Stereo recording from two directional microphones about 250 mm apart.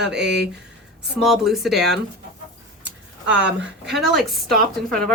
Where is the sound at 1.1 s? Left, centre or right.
Centre.